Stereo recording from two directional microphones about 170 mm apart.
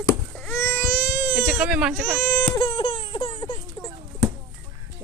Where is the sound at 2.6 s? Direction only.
30° left (ahead or behind).